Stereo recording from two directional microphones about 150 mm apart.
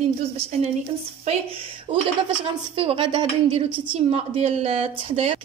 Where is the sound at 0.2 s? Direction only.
45° right (ahead or behind).